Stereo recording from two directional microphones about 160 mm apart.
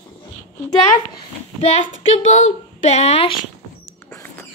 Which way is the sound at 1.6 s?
40° left (ahead or behind).